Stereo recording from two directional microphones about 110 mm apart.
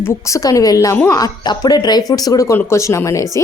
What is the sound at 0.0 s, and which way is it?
A woman's voice, 30° left (ahead or behind).